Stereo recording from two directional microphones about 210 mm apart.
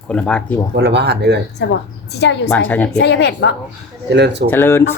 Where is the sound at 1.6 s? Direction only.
60° left (ahead or behind).